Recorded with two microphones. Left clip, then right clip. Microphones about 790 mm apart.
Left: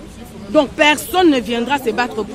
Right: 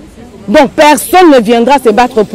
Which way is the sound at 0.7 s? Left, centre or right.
Right.